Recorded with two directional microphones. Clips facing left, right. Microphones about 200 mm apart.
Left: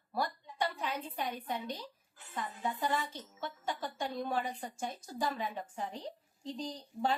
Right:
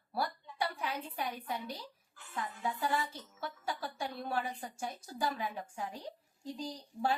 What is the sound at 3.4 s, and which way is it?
A woman's voice, 10° right (ahead or behind).